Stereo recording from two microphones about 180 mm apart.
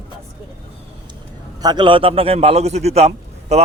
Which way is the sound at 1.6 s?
25° right (ahead or behind).